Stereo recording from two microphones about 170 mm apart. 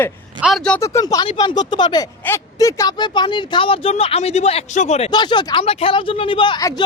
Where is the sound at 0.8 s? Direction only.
20° left (ahead or behind); by 5.1 s 40° left (ahead or behind).